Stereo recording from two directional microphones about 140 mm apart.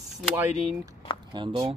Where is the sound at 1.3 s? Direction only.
35° right (ahead or behind).